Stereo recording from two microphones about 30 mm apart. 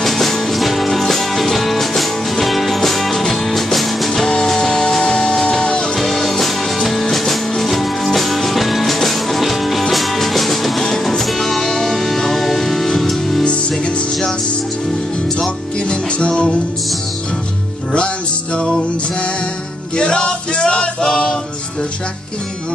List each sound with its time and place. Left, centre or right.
0.0 s music: centre
4.3 s music: left
5.9 s music: centre
13.5 s music: left
17.9 s music: left
20.0 s male singing: left